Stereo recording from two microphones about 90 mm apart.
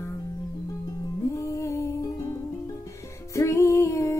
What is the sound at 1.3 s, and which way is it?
Music, 35° left (ahead or behind).